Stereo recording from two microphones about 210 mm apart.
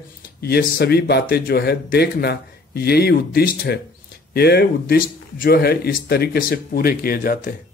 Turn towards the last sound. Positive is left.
turn(degrees=40)  # may be behind; listen again after turning